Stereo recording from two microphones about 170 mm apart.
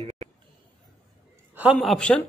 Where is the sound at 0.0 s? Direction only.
35° right (ahead or behind).